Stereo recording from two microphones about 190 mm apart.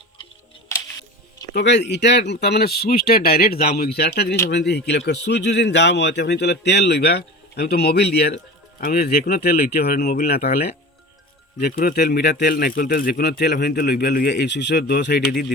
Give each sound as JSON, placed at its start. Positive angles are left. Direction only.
{"t": 1.5, "sound": "speech", "side_deg": 65}